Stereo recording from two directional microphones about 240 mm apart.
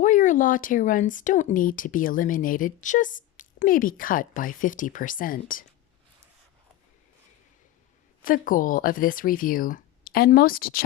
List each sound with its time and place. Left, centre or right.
0.0 s speech: left
8.2 s speech: left